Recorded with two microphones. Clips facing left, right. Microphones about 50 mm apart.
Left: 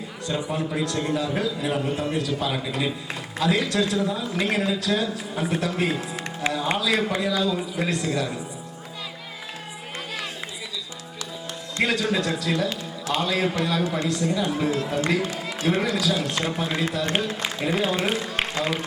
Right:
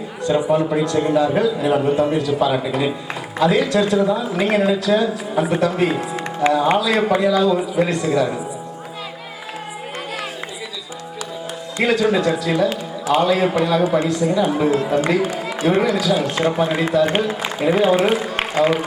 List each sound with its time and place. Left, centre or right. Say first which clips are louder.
0.3 s a man's voice: right 10 dB; centre
11.8 s a man's voice: right 6 dB; centre
14.1 s a man's voice: right 7 dB; centre